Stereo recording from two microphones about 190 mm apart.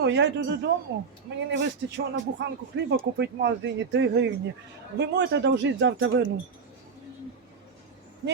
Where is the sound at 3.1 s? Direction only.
65° right (ahead or behind).